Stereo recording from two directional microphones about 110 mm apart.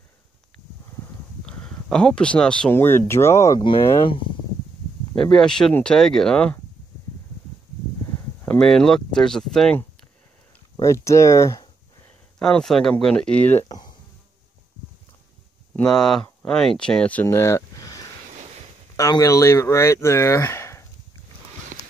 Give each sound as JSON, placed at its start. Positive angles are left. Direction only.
{"t": 1.4, "sound": "a sound", "side_deg": 5}
{"t": 2.7, "sound": "speech", "side_deg": 20}
{"t": 4.0, "sound": "speech", "side_deg": 50}
{"t": 5.1, "sound": "speech", "side_deg": 5}
{"t": 8.5, "sound": "speech", "side_deg": 5}
{"t": 10.8, "sound": "speech", "side_deg": 25}
{"t": 12.4, "sound": "speech", "side_deg": 5}
{"t": 13.7, "sound": "insect", "side_deg": 40}
{"t": 15.7, "sound": "speech", "side_deg": 5}
{"t": 17.3, "sound": "a sound", "side_deg": 25}
{"t": 18.9, "sound": "speech", "side_deg": 30}